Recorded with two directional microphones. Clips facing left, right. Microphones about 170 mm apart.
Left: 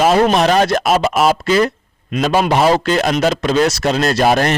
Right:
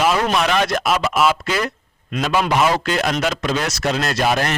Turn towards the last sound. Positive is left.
turn(degrees=40)  # may be behind; listen again after turning